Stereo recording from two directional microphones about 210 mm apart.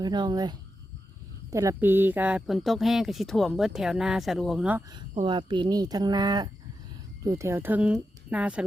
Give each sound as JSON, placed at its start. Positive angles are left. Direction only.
{"t": 0.0, "sound": "speech", "side_deg": -20}
{"t": 5.2, "sound": "speech", "side_deg": -20}